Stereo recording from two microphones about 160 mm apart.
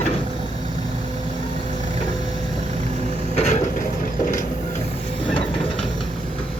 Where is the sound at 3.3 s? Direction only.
45° left (ahead or behind).